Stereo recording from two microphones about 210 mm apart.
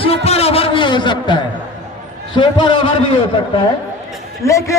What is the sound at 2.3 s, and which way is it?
Speech, 20° left (ahead or behind).